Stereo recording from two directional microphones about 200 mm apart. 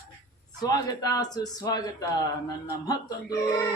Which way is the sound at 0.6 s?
20° left (ahead or behind).